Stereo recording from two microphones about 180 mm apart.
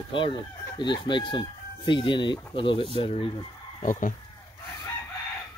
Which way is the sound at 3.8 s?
45° left (ahead or behind).